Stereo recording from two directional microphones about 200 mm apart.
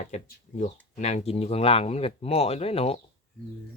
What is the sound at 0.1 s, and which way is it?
Speech, 35° left (ahead or behind).